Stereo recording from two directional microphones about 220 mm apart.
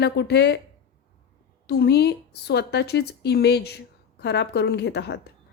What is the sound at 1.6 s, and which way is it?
A woman's voice, 50° left (ahead or behind).